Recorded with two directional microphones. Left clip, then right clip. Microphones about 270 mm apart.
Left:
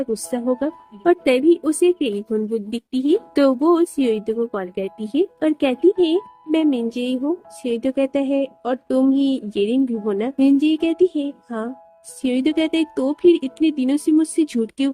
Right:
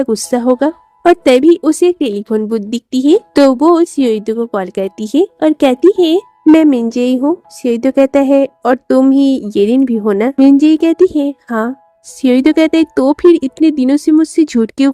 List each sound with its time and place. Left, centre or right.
0.0 s a woman's voice: right